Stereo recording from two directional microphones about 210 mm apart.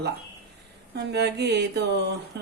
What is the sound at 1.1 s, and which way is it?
Speech, 50° right (ahead or behind).